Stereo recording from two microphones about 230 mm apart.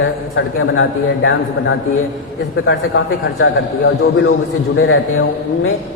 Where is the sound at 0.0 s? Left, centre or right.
Left.